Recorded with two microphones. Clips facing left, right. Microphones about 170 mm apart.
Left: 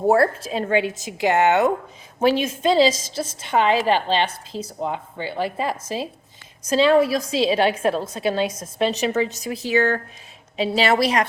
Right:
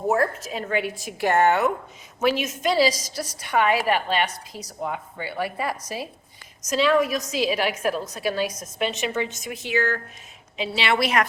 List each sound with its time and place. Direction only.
0.1 s a woman's voice: 30° left (ahead or behind)